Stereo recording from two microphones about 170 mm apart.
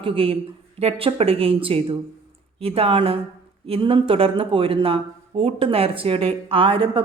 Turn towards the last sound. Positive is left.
turn(degrees=-30)  # may be behind; listen again after turning